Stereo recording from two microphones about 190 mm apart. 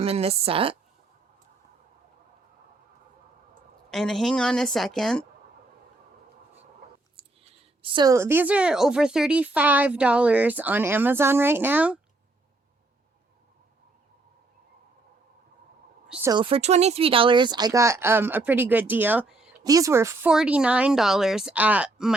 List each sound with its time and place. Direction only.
0.0 s a woman's voice: 30° right (ahead or behind)
3.8 s speech: centre (ahead or behind)
7.8 s a woman's voice: 25° right (ahead or behind); by 11.9 s 10° right (ahead or behind)
16.0 s a sound: 5° right (ahead or behind)
16.3 s a woman's voice: 30° right (ahead or behind); by 19.5 s 5° right (ahead or behind)
19.6 s a woman's voice: 20° right (ahead or behind)